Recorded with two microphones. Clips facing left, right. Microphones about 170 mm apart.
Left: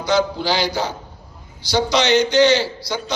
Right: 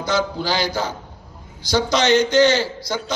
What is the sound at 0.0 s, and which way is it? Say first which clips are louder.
A man's voice: left 3 dB; 50° right (ahead or behind).